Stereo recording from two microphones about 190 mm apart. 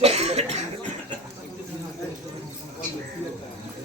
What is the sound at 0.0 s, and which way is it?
Cough, 35° right (ahead or behind).